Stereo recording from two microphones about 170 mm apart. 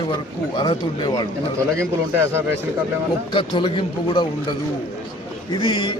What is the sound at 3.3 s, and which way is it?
Speech, 30° left (ahead or behind).